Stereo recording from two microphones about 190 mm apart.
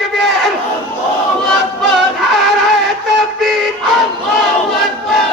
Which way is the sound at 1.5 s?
Centre (ahead or behind).